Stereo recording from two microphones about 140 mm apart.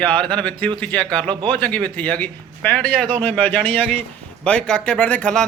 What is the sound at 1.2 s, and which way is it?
Speech, 35° right (ahead or behind).